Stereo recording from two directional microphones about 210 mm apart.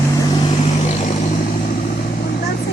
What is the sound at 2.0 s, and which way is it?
Vehicle, 45° left (ahead or behind).